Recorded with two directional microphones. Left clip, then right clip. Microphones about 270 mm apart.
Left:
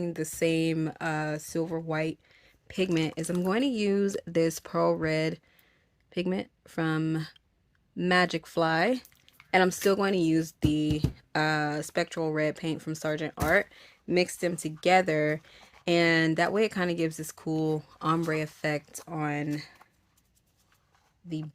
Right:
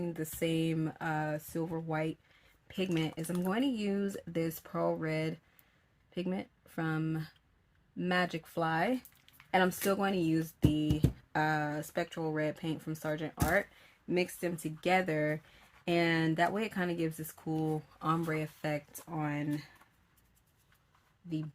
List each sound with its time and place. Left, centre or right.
0.0 s speech: left